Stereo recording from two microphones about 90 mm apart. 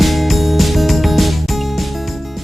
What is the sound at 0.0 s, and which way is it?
Music, centre (ahead or behind).